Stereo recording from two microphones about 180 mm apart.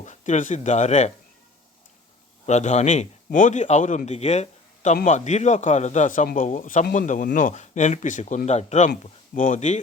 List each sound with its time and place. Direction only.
0.0 s speech: 40° left (ahead or behind)
2.5 s a man's voice: 40° left (ahead or behind)